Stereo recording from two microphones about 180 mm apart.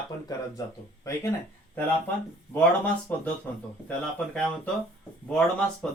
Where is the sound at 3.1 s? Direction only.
10° left (ahead or behind).